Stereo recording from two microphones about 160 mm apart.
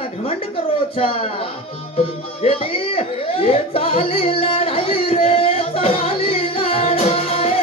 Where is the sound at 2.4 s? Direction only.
35° left (ahead or behind).